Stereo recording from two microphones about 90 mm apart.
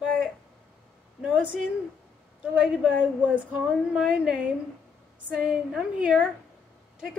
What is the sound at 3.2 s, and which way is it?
Speech, 15° right (ahead or behind).